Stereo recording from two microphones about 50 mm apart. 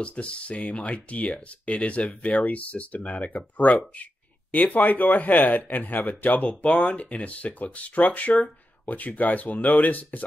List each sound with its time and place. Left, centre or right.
0.0 s speech: left
6.6 s speech: left